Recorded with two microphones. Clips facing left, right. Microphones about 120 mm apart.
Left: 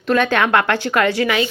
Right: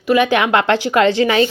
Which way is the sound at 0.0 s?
10° right (ahead or behind).